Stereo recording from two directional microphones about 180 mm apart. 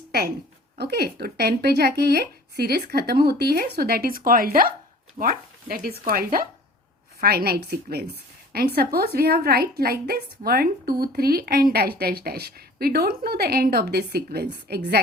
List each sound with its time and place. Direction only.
0.8 s a woman's voice: 65° right (ahead or behind)